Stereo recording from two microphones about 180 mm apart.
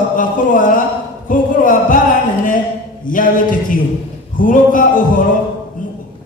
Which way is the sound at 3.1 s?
50° left (ahead or behind).